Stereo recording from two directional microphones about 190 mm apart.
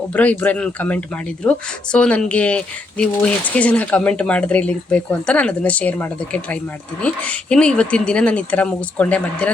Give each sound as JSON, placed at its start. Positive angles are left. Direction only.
{"t": 0.1, "sound": "speech", "side_deg": 10}